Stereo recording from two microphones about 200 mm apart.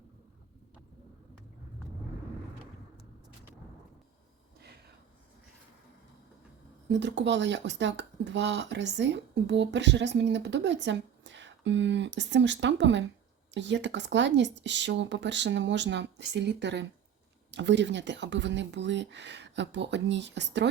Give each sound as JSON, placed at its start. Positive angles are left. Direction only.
{"t": 6.8, "sound": "speech", "side_deg": -60}